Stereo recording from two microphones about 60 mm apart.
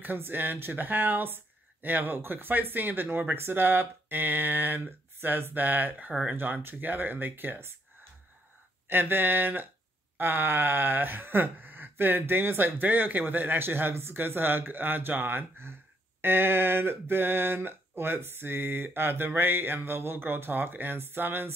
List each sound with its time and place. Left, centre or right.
0.0 s speech: right
8.8 s speech: right